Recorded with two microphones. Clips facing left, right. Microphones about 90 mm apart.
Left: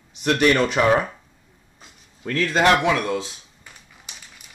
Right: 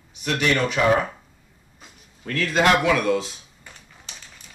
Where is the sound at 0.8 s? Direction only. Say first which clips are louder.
Even; 35° left (ahead or behind).